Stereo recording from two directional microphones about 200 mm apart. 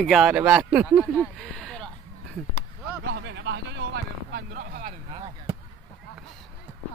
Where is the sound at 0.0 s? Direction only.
Centre (ahead or behind).